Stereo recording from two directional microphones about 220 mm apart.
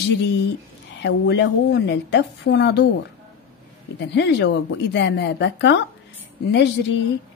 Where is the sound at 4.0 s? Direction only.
50° left (ahead or behind).